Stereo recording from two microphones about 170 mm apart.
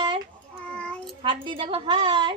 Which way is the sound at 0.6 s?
5° left (ahead or behind).